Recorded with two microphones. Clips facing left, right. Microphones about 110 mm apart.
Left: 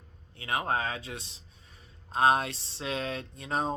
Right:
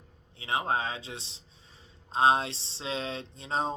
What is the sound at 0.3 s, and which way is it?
A man's voice, 25° right (ahead or behind).